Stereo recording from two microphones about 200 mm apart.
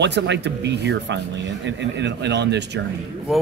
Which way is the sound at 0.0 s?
60° right (ahead or behind).